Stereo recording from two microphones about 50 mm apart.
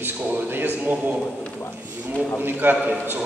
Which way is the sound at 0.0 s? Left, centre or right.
Right.